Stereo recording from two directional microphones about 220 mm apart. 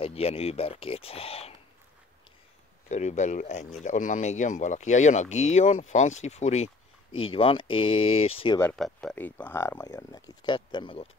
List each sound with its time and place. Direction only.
0.0 s speech: 25° left (ahead or behind)
2.9 s speech: 30° left (ahead or behind)
8.5 s speech: 5° left (ahead or behind); by 11.1 s 20° left (ahead or behind)